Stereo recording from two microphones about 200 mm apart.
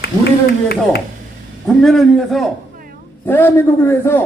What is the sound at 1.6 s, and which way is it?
A man's voice, centre (ahead or behind).